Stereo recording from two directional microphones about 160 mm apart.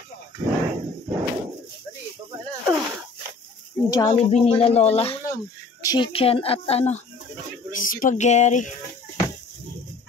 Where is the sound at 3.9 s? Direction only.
25° left (ahead or behind).